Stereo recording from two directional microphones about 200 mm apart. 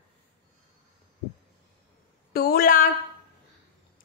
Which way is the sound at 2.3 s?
50° left (ahead or behind).